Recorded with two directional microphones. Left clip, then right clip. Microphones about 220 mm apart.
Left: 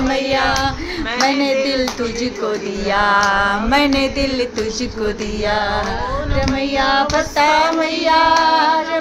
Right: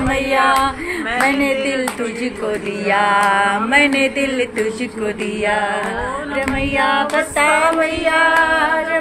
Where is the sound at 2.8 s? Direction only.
10° left (ahead or behind).